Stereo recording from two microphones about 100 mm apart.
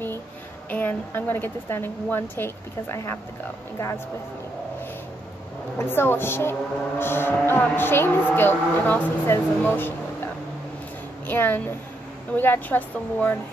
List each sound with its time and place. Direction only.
0.7 s speech: 15° left (ahead or behind)
5.8 s a woman's voice: 20° left (ahead or behind)